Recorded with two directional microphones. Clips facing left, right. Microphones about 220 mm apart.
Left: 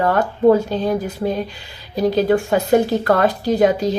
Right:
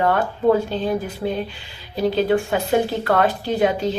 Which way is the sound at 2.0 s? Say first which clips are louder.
Left 2 dB; 40° left (ahead or behind).